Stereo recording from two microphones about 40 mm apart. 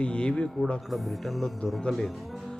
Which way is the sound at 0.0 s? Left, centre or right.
Left.